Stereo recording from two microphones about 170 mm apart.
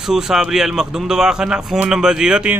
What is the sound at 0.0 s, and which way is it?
Speech, 5° right (ahead or behind).